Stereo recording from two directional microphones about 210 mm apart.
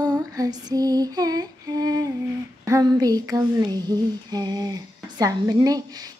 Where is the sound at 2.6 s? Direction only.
15° right (ahead or behind).